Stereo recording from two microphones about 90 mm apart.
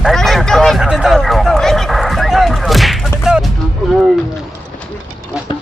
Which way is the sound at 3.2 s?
5° right (ahead or behind).